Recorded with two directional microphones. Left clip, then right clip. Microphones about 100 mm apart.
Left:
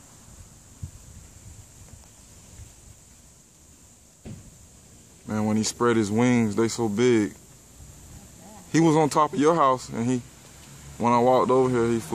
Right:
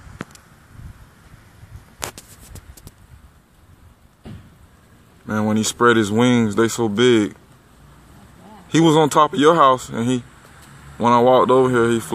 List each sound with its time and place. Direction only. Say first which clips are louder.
5.2 s speech: right 6 dB; 30° right (ahead or behind)
8.6 s speech: right 6 dB; 30° right (ahead or behind)